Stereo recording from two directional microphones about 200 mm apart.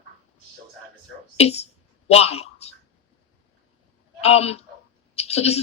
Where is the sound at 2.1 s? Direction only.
30° left (ahead or behind).